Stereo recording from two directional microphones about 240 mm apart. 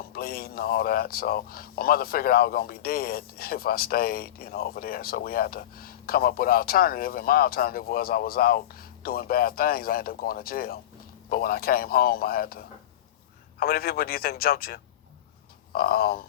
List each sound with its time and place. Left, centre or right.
0.1 s a man's voice: left